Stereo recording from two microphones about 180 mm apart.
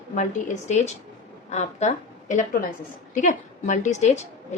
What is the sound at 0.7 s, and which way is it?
A woman's voice, 40° left (ahead or behind).